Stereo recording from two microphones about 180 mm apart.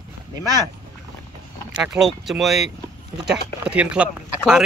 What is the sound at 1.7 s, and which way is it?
Speech, 5° right (ahead or behind).